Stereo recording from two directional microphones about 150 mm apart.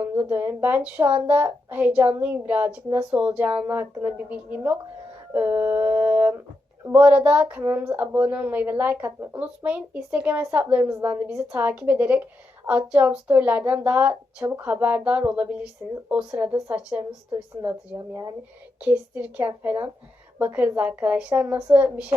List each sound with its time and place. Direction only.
0.0 s a woman's voice: 15° right (ahead or behind)